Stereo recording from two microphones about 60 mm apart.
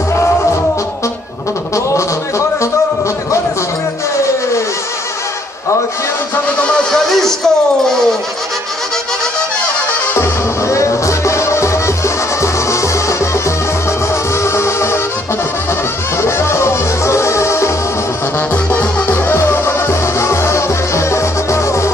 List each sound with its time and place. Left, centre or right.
1.9 s music: left
6.9 s music: centre
10.1 s music: left
16.2 s music: left
18.5 s music: left
19.0 s music: left